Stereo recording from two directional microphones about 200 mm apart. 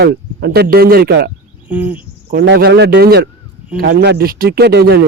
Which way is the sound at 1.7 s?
10° right (ahead or behind).